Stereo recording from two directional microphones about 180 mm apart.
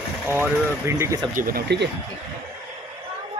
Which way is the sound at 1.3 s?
55° right (ahead or behind).